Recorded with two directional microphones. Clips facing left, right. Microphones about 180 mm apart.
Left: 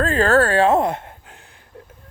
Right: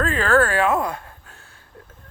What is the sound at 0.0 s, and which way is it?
Speech, 35° left (ahead or behind).